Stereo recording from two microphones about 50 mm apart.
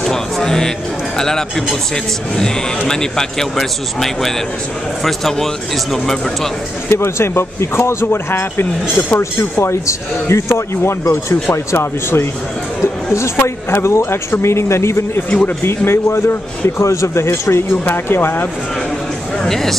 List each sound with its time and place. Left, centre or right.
0.0 s speech: centre
2.9 s speech: centre
6.9 s speech: left
9.2 s a man's voice: left
12.8 s chatter: left
13.4 s a man's voice: left
15.2 s speech: left
15.8 s a man's voice: left
16.9 s a man's voice: left
17.8 s speech: left
19.4 s speech: centre